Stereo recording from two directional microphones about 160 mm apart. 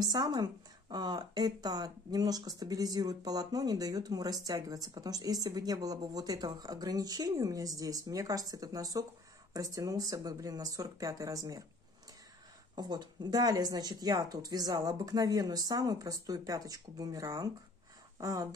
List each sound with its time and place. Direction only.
0.0 s speech: 25° right (ahead or behind)
12.7 s speech: 25° right (ahead or behind)